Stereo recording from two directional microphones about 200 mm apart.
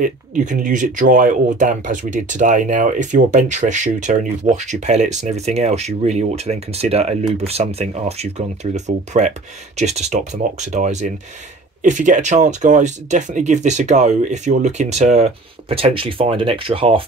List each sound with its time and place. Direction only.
0.0 s speech: 40° right (ahead or behind)